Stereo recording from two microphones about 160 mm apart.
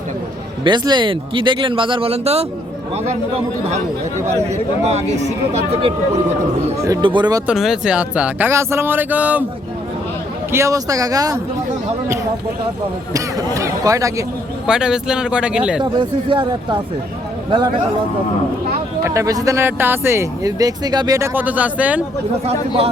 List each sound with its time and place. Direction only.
0.6 s speech: 30° right (ahead or behind)
4.9 s speech: 45° right (ahead or behind)
7.0 s speech: 30° right (ahead or behind)
7.4 s speech: 5° right (ahead or behind)
10.5 s speech: 20° right (ahead or behind)
13.1 s speech: 20° right (ahead or behind)
14.7 s speech: 5° right (ahead or behind)
15.8 s speech: 30° right (ahead or behind)
19.0 s speech: 20° right (ahead or behind)
22.4 s speech: 35° right (ahead or behind)